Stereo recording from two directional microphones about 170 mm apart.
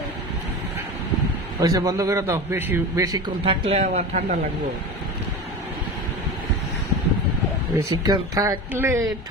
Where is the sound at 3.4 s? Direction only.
35° right (ahead or behind).